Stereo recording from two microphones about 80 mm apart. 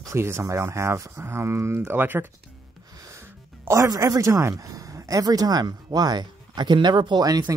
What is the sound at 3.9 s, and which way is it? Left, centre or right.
Speech, right.